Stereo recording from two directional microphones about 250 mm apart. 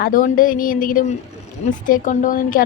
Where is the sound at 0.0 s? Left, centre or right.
Left.